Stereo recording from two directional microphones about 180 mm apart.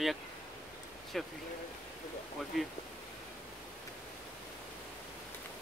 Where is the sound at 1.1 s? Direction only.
Centre (ahead or behind).